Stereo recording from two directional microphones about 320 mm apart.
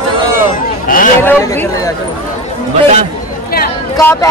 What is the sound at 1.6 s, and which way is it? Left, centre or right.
Speech, centre.